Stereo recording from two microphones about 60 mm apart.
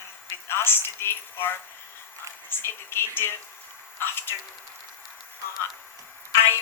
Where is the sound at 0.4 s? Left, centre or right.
Left.